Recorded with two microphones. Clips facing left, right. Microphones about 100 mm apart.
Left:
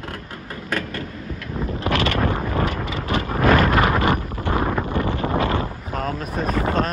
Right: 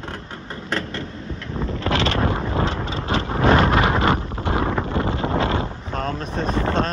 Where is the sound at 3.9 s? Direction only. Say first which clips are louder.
Even; 25° right (ahead or behind).